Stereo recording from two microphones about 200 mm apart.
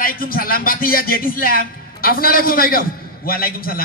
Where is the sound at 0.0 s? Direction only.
45° left (ahead or behind).